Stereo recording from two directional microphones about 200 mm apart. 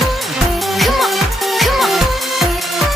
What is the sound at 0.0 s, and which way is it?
Music, centre (ahead or behind).